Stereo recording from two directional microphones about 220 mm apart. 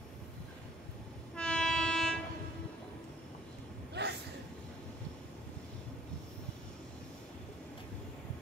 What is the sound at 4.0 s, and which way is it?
Train, 50° right (ahead or behind).